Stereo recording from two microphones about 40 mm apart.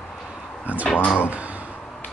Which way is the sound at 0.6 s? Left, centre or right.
Right.